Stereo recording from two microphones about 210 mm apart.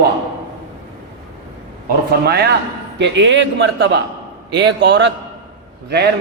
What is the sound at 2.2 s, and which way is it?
A man's voice, 50° right (ahead or behind).